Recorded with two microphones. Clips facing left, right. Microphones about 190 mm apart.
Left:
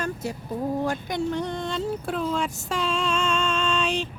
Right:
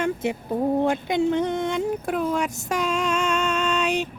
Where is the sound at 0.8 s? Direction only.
20° right (ahead or behind).